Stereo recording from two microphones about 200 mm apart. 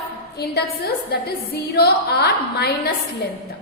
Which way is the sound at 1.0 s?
55° left (ahead or behind).